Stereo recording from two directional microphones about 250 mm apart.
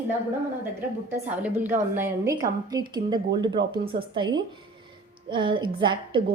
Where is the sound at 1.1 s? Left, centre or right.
Centre.